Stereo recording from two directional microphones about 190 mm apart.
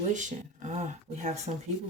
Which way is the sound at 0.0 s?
40° right (ahead or behind).